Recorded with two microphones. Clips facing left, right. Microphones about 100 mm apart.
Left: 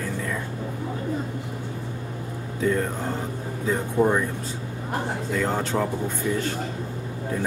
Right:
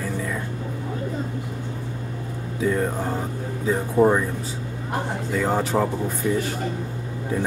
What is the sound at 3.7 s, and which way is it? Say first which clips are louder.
Speech: right 3 dB; 15° right (ahead or behind).